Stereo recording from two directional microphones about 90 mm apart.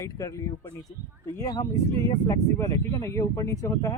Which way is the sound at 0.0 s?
35° left (ahead or behind).